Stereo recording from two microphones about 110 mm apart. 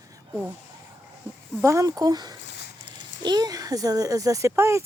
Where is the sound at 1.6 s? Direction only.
30° right (ahead or behind).